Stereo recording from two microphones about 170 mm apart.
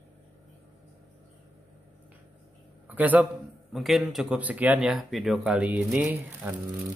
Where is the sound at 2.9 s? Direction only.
10° right (ahead or behind).